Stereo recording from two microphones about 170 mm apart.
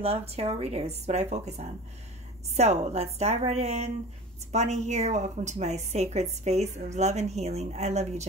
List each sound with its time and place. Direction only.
0.0 s a woman's voice: 35° right (ahead or behind)